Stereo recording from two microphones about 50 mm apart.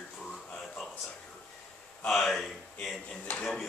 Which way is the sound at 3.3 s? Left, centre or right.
Left.